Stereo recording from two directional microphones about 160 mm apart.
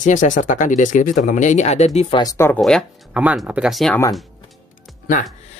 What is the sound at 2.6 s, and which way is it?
Speech, centre (ahead or behind).